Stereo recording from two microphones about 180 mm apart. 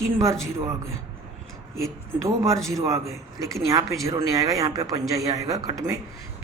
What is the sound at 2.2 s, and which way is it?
Speech, 15° right (ahead or behind).